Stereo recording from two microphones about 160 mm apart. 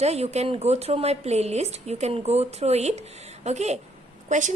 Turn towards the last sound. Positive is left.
turn(degrees=-50)  # may be behind; listen again after turning